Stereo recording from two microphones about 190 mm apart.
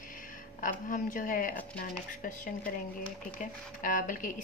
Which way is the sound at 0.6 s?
45° left (ahead or behind).